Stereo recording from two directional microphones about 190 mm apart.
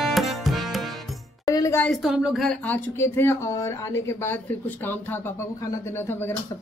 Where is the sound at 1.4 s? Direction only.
15° left (ahead or behind).